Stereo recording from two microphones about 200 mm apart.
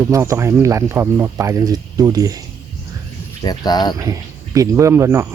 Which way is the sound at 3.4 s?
20° left (ahead or behind).